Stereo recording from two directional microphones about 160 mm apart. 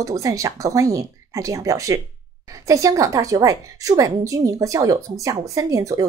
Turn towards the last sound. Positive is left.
turn(degrees=-20)  # may be behind; listen again after turning